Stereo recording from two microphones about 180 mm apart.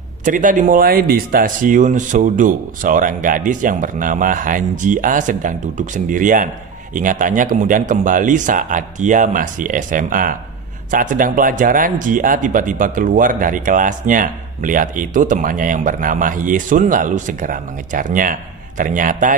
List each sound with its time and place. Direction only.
0.2 s speech: 45° right (ahead or behind)